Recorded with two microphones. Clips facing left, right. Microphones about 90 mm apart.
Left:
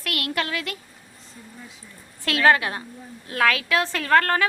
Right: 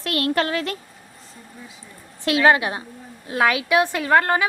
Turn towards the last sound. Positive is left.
turn(degrees=-15)  # may be behind; listen again after turning